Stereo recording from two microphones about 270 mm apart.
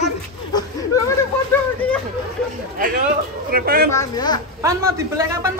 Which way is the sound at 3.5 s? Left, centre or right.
Right.